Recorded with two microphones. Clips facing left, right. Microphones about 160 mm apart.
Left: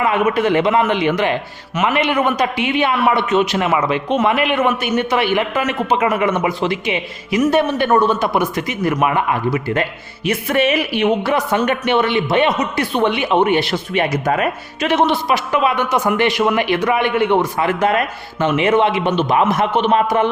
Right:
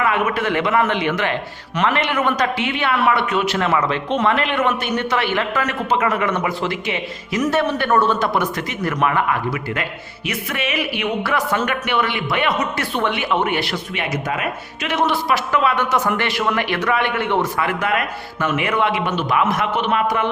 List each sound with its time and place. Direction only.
0.0 s a man's voice: 20° left (ahead or behind)
11.2 s speech: 20° left (ahead or behind)
13.9 s speech: 40° left (ahead or behind)
15.0 s a man's voice: 20° left (ahead or behind)
17.6 s speech: 30° left (ahead or behind)